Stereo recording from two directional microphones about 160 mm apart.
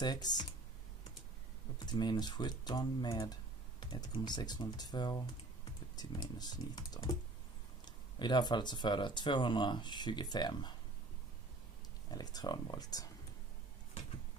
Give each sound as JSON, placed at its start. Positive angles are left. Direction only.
{"t": 0.0, "sound": "speech", "side_deg": 25}
{"t": 1.9, "sound": "speech", "side_deg": 25}
{"t": 12.1, "sound": "speech", "side_deg": 25}